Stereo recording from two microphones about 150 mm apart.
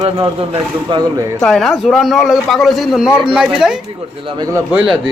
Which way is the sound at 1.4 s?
Centre (ahead or behind).